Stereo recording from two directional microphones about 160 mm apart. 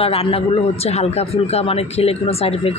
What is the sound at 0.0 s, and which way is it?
Speech, 35° left (ahead or behind).